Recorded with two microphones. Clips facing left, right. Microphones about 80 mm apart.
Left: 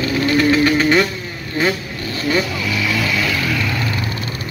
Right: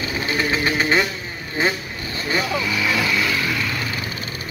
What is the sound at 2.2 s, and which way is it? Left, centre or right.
Vehicle, right.